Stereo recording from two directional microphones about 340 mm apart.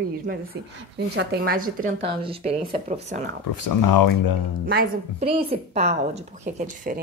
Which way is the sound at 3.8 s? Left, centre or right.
Left.